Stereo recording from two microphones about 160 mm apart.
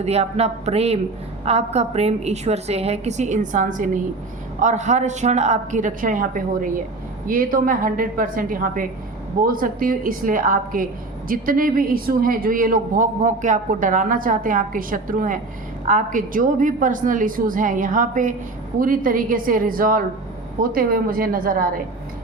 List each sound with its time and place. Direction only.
0.0 s a woman's voice: 40° right (ahead or behind); by 21.7 s 60° right (ahead or behind)